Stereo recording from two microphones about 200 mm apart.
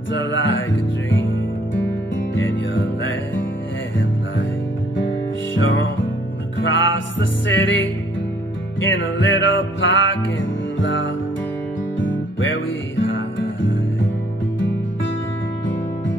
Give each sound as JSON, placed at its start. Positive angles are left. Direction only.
{"t": 0.1, "sound": "music", "side_deg": 65}
{"t": 2.3, "sound": "music", "side_deg": 70}
{"t": 5.5, "sound": "music", "side_deg": 70}